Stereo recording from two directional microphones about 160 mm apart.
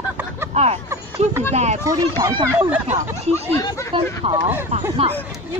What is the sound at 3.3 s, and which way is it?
Speech, 20° left (ahead or behind).